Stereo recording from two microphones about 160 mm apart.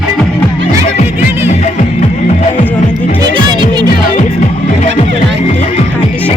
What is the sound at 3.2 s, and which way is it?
Music, 30° right (ahead or behind).